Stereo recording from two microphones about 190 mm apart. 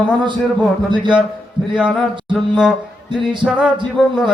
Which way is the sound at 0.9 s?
25° right (ahead or behind).